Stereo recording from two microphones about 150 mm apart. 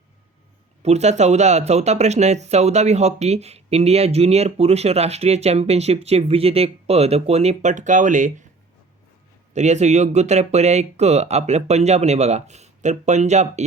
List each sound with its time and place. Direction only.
0.8 s speech: 45° right (ahead or behind)
9.5 s speech: 50° right (ahead or behind)